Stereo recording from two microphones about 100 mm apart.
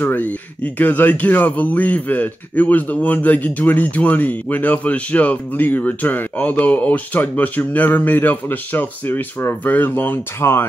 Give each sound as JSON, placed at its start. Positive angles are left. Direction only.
{"t": 0.0, "sound": "a man's voice", "side_deg": 15}